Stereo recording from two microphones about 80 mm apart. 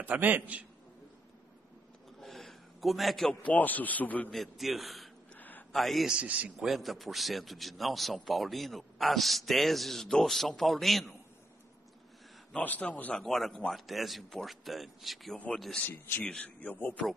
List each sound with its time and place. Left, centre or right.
0.0 s a man's voice: right
2.1 s a sound: centre
3.4 s a man's voice: left
4.3 s a man's voice: centre
5.3 s a sound: left
5.7 s a man's voice: centre
6.0 s a man's voice: centre
6.6 s a man's voice: centre
12.5 s a man's voice: centre
13.2 s a man's voice: centre
15.3 s a man's voice: centre